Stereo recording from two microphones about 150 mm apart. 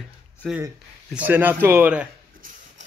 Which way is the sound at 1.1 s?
10° right (ahead or behind).